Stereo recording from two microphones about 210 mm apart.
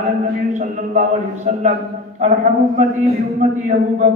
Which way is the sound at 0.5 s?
35° right (ahead or behind).